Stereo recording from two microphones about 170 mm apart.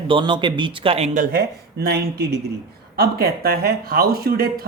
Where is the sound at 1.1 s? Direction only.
55° right (ahead or behind).